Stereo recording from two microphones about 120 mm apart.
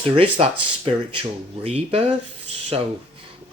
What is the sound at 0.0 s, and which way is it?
Speech, 50° right (ahead or behind).